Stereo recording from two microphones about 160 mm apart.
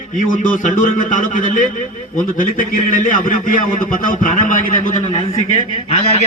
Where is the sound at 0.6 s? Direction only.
55° left (ahead or behind).